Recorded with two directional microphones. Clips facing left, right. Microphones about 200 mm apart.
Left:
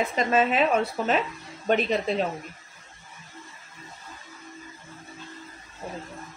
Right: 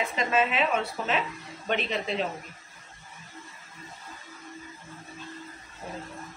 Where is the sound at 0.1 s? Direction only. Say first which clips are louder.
Left 3 dB; 40° left (ahead or behind).